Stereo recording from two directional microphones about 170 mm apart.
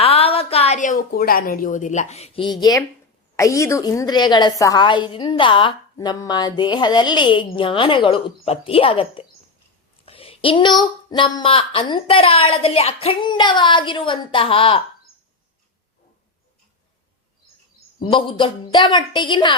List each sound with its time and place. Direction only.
0.0 s a woman's voice: 35° left (ahead or behind)
18.0 s a woman's voice: 30° left (ahead or behind)